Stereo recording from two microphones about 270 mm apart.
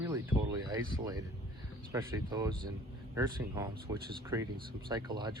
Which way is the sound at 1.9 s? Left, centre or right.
Centre.